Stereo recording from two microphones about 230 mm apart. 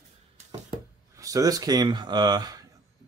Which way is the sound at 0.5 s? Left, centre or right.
Centre.